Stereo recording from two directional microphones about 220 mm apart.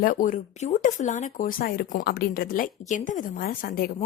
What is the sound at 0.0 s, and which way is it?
Speech, 35° left (ahead or behind).